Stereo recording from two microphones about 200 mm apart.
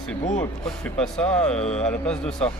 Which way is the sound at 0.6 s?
5° left (ahead or behind).